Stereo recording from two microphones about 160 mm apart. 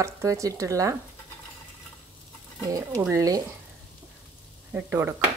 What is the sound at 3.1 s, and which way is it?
Speech, 20° right (ahead or behind).